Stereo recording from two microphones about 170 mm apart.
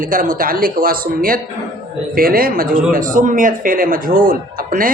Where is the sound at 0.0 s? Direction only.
50° right (ahead or behind).